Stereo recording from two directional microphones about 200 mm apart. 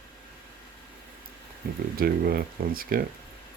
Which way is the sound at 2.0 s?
50° right (ahead or behind).